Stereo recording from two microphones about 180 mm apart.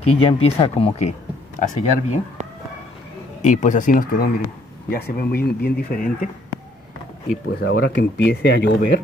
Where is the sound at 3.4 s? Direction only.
40° left (ahead or behind).